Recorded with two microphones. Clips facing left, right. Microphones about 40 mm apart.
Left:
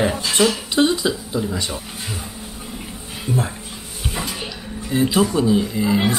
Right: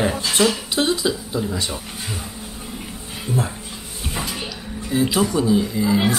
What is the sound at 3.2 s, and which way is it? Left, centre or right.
Music, centre.